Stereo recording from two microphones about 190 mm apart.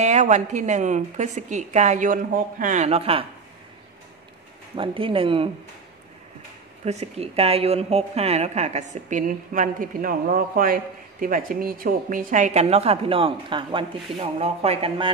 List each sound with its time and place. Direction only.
0.0 s a woman's voice: 40° right (ahead or behind)
4.7 s speech: 30° right (ahead or behind)
6.8 s a woman's voice: 35° right (ahead or behind)